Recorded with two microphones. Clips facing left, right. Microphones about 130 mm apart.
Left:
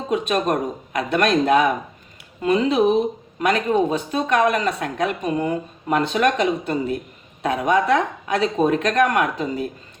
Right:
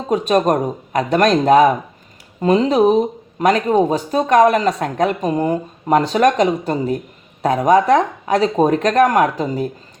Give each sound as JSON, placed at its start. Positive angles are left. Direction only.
{"t": 0.1, "sound": "speech", "side_deg": -40}